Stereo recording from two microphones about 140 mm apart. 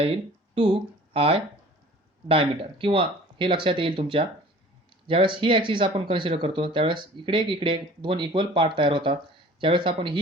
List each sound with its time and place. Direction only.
0.0 s speech: 40° right (ahead or behind)